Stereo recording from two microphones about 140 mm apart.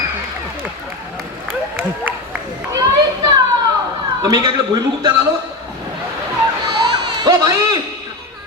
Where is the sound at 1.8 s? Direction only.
10° right (ahead or behind).